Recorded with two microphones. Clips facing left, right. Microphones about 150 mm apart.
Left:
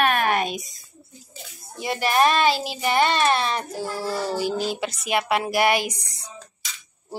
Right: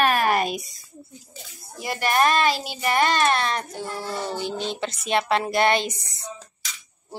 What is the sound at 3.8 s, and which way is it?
A woman's voice, 5° left (ahead or behind).